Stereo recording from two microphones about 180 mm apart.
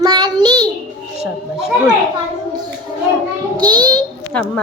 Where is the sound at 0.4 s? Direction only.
20° right (ahead or behind).